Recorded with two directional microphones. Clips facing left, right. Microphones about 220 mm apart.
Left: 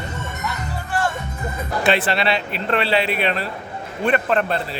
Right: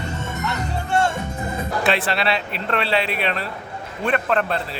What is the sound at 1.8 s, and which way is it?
Speech, centre (ahead or behind).